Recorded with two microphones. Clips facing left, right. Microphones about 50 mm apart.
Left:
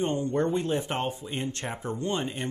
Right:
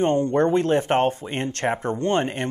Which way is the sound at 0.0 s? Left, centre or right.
Right.